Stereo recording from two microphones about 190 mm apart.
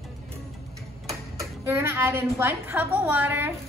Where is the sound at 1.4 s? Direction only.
15° right (ahead or behind).